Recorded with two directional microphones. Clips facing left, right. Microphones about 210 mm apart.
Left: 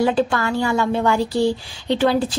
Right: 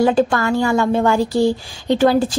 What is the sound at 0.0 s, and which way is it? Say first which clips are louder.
A woman's voice: right 3 dB; 45° right (ahead or behind).